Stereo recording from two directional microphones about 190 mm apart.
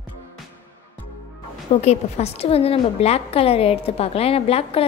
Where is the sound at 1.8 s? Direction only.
35° left (ahead or behind).